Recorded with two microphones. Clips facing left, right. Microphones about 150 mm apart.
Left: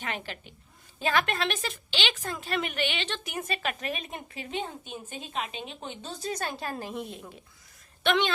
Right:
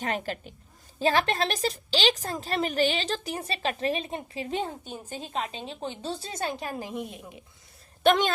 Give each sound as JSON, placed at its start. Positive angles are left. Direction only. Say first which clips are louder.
{"t": 0.0, "sound": "a woman's voice", "louder": "right 6 dB", "side_deg": -40}
{"t": 8.0, "sound": "speech", "louder": "right 4 dB", "side_deg": -40}